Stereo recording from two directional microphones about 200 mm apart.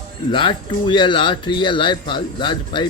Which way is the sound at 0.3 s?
25° left (ahead or behind).